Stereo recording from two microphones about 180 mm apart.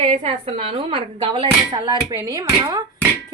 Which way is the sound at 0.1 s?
35° right (ahead or behind).